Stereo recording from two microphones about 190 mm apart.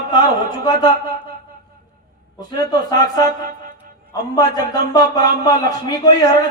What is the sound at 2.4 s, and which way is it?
Speech, 20° left (ahead or behind).